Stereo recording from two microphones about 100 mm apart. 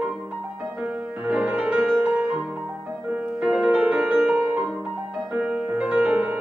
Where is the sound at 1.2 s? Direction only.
10° right (ahead or behind).